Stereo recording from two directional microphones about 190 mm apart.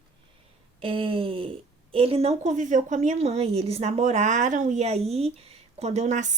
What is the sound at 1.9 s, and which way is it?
A woman's voice, 30° right (ahead or behind).